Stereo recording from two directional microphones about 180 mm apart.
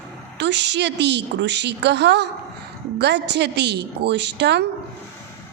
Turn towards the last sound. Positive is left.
turn(degrees=-70)  # may be behind; listen again after turning